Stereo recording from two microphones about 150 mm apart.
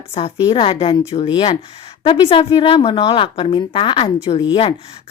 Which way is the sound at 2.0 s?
35° left (ahead or behind).